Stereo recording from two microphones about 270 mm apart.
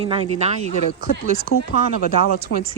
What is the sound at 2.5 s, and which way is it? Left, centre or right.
Speech, left.